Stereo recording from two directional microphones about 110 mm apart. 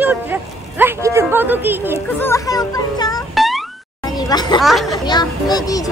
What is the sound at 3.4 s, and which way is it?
Music, centre (ahead or behind).